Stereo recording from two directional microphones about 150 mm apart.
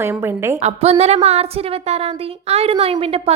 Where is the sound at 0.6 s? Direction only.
45° right (ahead or behind).